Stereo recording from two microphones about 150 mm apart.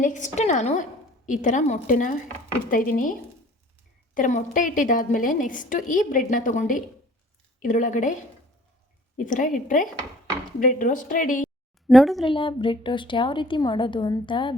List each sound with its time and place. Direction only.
0.0 s a woman's voice: 55° left (ahead or behind)
9.1 s a woman's voice: 60° left (ahead or behind)
11.9 s speech: centre (ahead or behind)
12.2 s a woman's voice: 35° left (ahead or behind)